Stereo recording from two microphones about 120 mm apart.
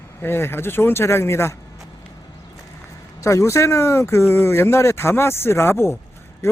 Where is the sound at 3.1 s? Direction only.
25° left (ahead or behind).